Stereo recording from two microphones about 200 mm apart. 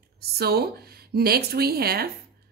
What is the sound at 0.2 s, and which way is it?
Speech, 50° right (ahead or behind).